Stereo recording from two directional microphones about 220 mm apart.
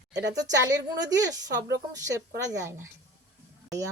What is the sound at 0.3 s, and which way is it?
Speech, 15° right (ahead or behind).